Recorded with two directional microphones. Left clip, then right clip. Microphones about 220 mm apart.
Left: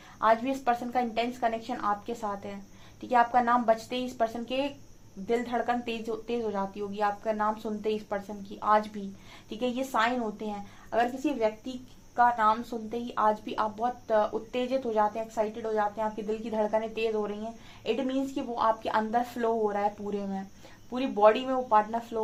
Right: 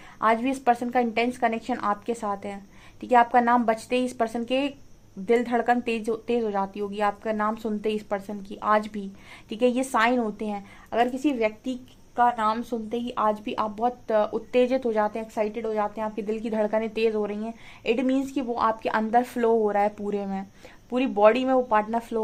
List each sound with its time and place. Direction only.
0.2 s speech: 40° right (ahead or behind)
12.1 s speech: 35° right (ahead or behind)